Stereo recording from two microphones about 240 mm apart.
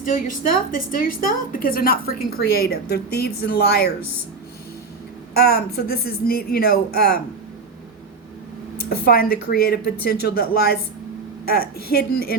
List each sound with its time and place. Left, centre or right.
0.0 s speech: left
5.3 s speech: left
8.9 s speech: left